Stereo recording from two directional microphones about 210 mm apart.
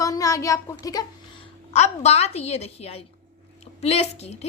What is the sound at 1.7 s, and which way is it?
A woman's voice, 30° left (ahead or behind).